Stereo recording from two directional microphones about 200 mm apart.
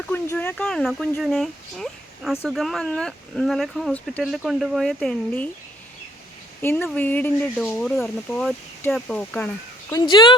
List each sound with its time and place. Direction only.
0.1 s speech: 10° left (ahead or behind)
6.6 s speech: 10° left (ahead or behind)
9.9 s speech: 20° left (ahead or behind)